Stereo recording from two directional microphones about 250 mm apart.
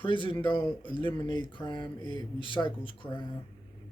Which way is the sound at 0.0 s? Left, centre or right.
Centre.